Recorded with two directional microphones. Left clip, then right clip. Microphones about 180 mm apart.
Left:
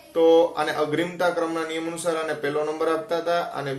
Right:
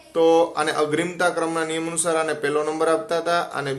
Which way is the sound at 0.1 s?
40° right (ahead or behind).